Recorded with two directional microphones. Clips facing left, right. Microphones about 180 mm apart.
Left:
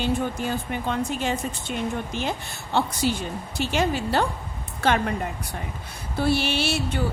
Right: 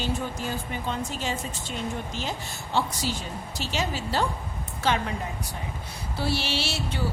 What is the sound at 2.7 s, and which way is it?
Speech, 60° left (ahead or behind).